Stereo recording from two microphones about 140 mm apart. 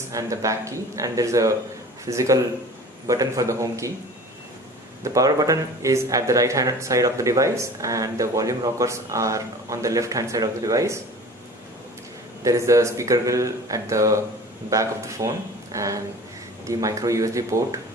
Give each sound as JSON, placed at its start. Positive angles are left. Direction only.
{"t": 0.1, "sound": "speech", "side_deg": -25}
{"t": 5.0, "sound": "speech", "side_deg": -25}
{"t": 12.4, "sound": "speech", "side_deg": -25}